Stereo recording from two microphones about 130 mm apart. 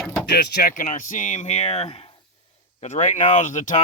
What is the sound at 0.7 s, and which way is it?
Speech, 85° left.